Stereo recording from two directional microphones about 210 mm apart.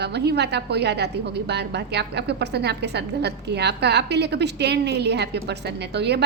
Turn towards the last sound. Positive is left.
turn(degrees=-55)  # may be behind; listen again after turning